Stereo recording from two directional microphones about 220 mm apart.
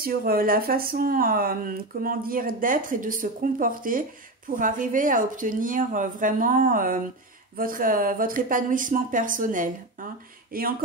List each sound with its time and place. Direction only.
0.0 s speech: 40° right (ahead or behind)